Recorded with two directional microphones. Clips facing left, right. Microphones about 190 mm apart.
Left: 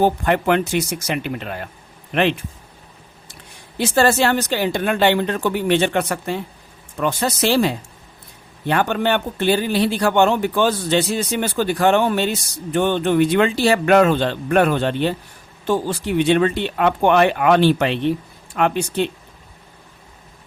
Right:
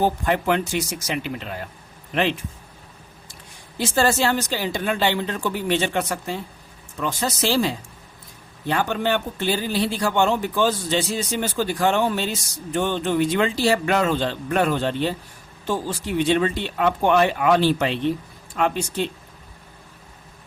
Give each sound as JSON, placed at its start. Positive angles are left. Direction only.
{"t": 0.0, "sound": "speech", "side_deg": 65}
{"t": 3.8, "sound": "speech", "side_deg": 65}